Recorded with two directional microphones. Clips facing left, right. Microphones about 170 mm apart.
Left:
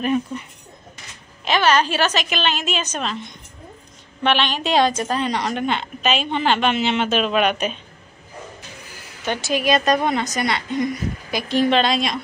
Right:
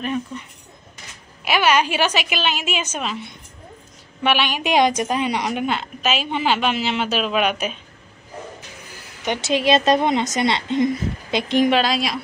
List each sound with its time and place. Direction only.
1.4 s a woman's voice: 10° right (ahead or behind)
9.2 s a woman's voice: 20° right (ahead or behind)
11.8 s a woman's voice: 5° right (ahead or behind)